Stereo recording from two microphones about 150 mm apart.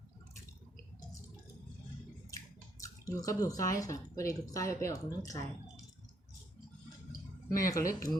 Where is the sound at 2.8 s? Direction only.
20° left (ahead or behind).